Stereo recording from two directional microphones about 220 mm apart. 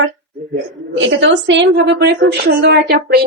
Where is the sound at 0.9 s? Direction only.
55° right (ahead or behind).